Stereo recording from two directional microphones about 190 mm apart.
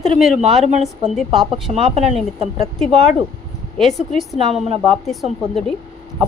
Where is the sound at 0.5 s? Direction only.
35° right (ahead or behind).